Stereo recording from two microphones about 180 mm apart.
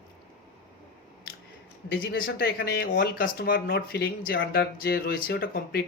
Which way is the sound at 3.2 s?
55° left (ahead or behind).